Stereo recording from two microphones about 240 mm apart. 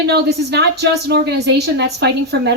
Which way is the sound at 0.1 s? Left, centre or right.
Right.